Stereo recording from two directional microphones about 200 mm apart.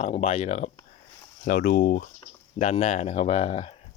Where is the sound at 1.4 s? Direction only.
45° left (ahead or behind).